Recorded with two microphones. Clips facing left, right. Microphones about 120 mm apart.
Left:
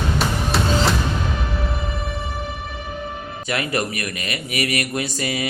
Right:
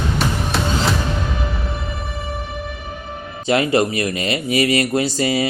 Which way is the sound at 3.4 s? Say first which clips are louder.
Right 8 dB; 25° right (ahead or behind).